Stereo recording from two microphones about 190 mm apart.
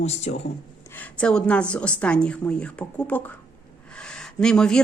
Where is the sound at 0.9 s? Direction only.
5° left (ahead or behind).